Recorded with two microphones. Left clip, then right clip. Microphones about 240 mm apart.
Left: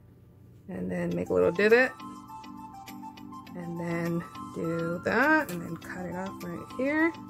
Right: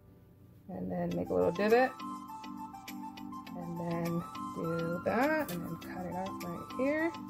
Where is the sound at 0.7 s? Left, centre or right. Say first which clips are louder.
Left 4 dB; left.